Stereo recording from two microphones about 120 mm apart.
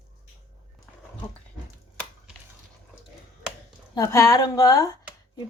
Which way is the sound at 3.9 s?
25° left (ahead or behind).